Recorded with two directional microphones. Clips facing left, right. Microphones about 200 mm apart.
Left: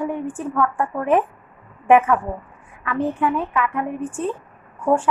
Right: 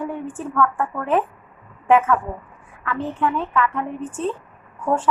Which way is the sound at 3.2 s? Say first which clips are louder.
Even; 10° left (ahead or behind).